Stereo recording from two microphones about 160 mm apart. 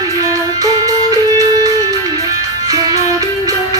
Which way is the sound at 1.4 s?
20° right (ahead or behind).